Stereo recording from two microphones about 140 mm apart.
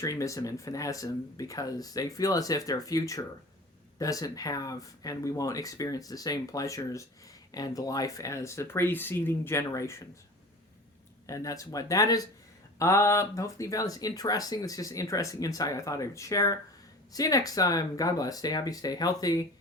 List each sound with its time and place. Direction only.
0.0 s speech: 20° left (ahead or behind)
11.3 s speech: 25° left (ahead or behind)